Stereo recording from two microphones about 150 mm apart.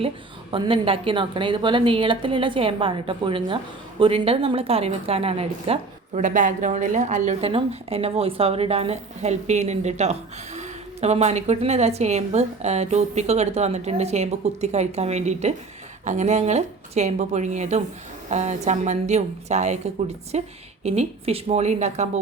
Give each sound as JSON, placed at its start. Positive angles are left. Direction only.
{"t": 0.5, "sound": "a woman's voice", "side_deg": -35}
{"t": 6.2, "sound": "a woman's voice", "side_deg": -60}